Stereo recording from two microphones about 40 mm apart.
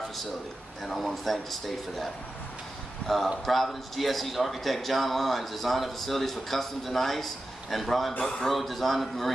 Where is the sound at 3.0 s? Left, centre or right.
Left.